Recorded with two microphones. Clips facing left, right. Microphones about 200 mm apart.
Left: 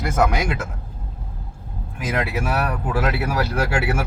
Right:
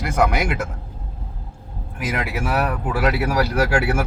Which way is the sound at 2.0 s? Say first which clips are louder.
Left 1 dB; 10° right (ahead or behind).